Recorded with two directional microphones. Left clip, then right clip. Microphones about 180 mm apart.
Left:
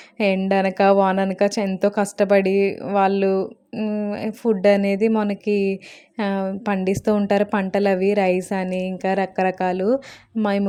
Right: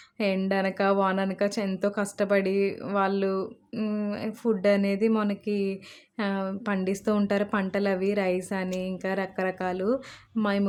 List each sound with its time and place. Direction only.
0.2 s speech: 30° left (ahead or behind)